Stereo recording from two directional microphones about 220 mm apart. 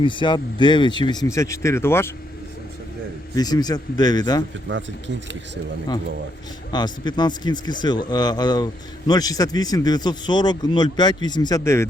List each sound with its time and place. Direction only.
0.0 s speech: 20° left (ahead or behind)
3.3 s a man's voice: 20° left (ahead or behind)
4.7 s speech: 55° right (ahead or behind)
6.7 s speech: 20° left (ahead or behind)